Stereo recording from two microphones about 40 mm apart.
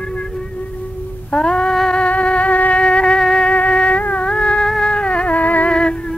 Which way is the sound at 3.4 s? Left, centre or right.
Left.